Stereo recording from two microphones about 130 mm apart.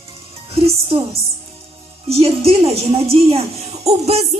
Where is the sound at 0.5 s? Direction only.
45° right (ahead or behind).